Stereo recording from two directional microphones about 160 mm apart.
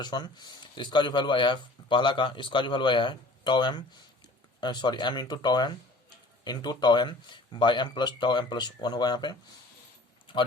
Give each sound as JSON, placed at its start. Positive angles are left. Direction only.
{"t": 0.0, "sound": "speech", "side_deg": 25}